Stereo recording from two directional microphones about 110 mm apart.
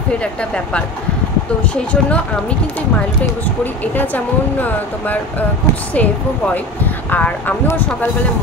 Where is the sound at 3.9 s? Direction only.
15° left (ahead or behind).